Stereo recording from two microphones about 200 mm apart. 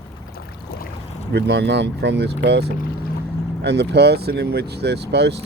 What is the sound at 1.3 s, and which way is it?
Speech, 60° right (ahead or behind).